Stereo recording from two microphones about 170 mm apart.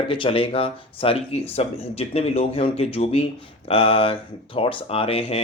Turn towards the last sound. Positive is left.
turn(degrees=35)  # may be behind; listen again after turning